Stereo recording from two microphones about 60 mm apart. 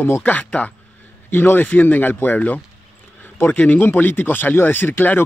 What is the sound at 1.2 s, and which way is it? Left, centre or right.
Speech, left.